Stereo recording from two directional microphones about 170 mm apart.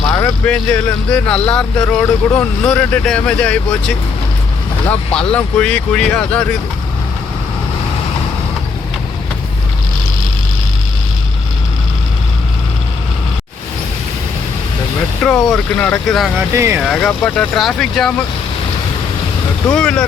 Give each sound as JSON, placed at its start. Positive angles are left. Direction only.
{"t": 0.1, "sound": "speech", "side_deg": 10}
{"t": 15.2, "sound": "speech", "side_deg": 5}
{"t": 16.5, "sound": "speech", "side_deg": -15}
{"t": 16.8, "sound": "speech", "side_deg": 0}
{"t": 19.7, "sound": "speech", "side_deg": 5}